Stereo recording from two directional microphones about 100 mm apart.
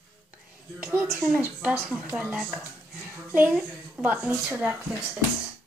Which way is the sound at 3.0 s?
20° right (ahead or behind).